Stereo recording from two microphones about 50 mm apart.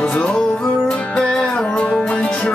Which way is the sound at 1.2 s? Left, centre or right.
Centre.